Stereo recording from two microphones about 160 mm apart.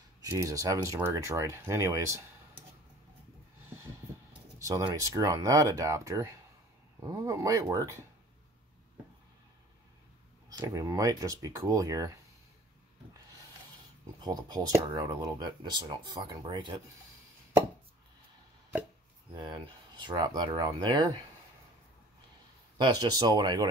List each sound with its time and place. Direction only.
0.2 s speech: 20° right (ahead or behind)
4.6 s speech: 20° right (ahead or behind)
10.6 s speech: 20° right (ahead or behind)
14.2 s speech: 25° right (ahead or behind)
19.3 s speech: 30° right (ahead or behind)
22.8 s speech: 25° right (ahead or behind)